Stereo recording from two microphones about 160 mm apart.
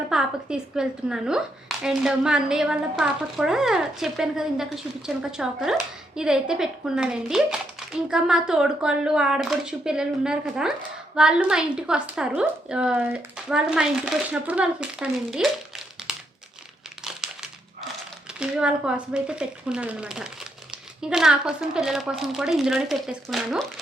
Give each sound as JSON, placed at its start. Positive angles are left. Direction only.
{"t": 0.1, "sound": "speech", "side_deg": -5}
{"t": 17.0, "sound": "crumpling", "side_deg": -5}
{"t": 18.3, "sound": "speech", "side_deg": -5}